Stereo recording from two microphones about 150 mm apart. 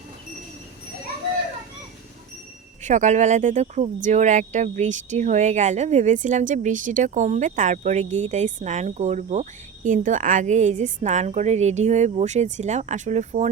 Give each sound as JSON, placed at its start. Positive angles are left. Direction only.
{"t": 2.8, "sound": "speech", "side_deg": -55}